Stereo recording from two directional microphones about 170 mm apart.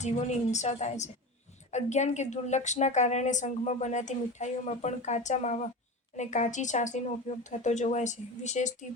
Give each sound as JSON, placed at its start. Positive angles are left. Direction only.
{"t": 0.0, "sound": "a woman's voice", "side_deg": 45}